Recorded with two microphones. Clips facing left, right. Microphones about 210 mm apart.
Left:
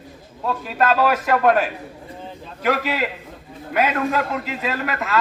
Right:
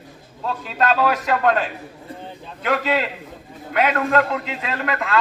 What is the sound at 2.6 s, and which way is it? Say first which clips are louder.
A man's voice: even; 10° left (ahead or behind).